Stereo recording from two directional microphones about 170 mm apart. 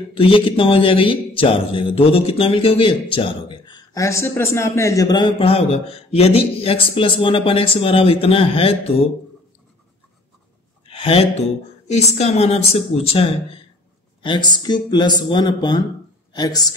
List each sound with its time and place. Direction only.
0.1 s a man's voice: 30° left (ahead or behind)
10.9 s a man's voice: 35° left (ahead or behind)